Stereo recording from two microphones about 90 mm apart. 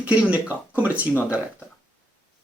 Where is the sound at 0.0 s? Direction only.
15° right (ahead or behind).